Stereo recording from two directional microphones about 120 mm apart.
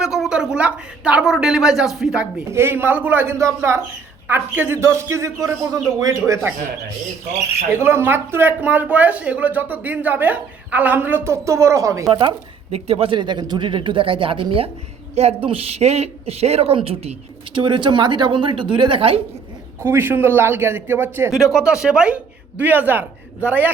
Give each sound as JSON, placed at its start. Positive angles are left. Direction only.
{"t": 0.0, "sound": "a woman's voice", "side_deg": -5}
{"t": 2.5, "sound": "a man's voice", "side_deg": -20}
{"t": 7.7, "sound": "speech", "side_deg": -20}
{"t": 12.7, "sound": "speech", "side_deg": -55}
{"t": 15.1, "sound": "speech", "side_deg": -60}
{"t": 17.7, "sound": "a woman's voice", "side_deg": -40}
{"t": 19.8, "sound": "a man's voice", "side_deg": -20}
{"t": 21.5, "sound": "speech", "side_deg": -5}